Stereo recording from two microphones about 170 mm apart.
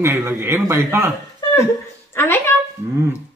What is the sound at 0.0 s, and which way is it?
Speech, 15° right (ahead or behind).